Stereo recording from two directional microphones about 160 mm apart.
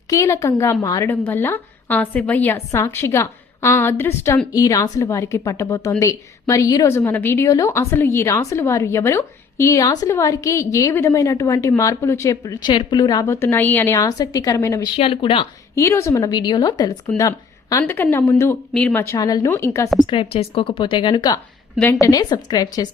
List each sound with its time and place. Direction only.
0.1 s a woman's voice: 20° left (ahead or behind)
13.2 s a woman's voice: 15° left (ahead or behind)
14.9 s a woman's voice: 35° left (ahead or behind)
15.7 s a woman's voice: 15° left (ahead or behind)
20.1 s a woman's voice: 35° left (ahead or behind)
21.8 s a woman's voice: 5° left (ahead or behind)
22.0 s a woman's voice: 25° left (ahead or behind)